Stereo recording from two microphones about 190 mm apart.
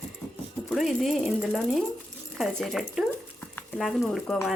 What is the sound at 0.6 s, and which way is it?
Speech, centre (ahead or behind).